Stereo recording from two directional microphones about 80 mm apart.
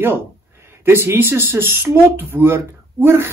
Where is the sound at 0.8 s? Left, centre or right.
Right.